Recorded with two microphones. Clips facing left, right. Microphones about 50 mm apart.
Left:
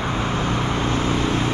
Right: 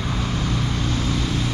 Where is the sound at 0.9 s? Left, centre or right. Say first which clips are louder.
Left 4 dB; left.